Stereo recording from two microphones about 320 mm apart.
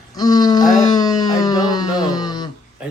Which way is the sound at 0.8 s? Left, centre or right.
Centre.